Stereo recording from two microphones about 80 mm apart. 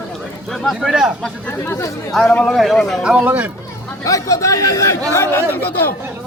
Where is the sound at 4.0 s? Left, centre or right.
Left.